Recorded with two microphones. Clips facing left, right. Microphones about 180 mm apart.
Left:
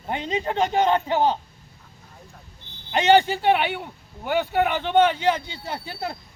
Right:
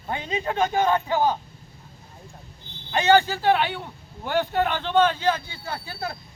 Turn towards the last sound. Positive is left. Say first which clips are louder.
# left 1 dB
turn(degrees=25)  # may be behind; listen again after turning